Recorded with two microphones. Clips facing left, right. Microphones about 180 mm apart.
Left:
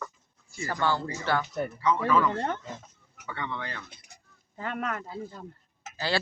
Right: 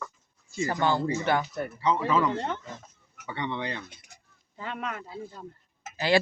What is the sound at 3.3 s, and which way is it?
Speech, 20° right (ahead or behind).